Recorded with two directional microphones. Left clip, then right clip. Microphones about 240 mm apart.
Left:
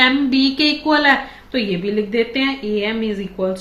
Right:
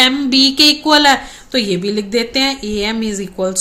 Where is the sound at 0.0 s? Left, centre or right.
Right.